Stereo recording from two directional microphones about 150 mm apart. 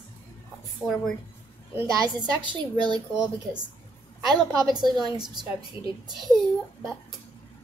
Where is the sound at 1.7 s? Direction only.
25° right (ahead or behind).